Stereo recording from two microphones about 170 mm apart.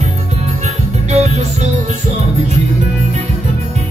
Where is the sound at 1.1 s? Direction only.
40° right (ahead or behind).